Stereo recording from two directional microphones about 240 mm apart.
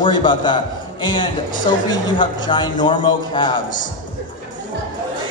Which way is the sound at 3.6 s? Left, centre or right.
Left.